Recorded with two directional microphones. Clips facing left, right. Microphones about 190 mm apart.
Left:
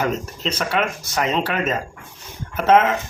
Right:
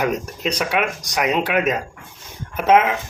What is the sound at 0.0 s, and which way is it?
Speech, 15° right (ahead or behind).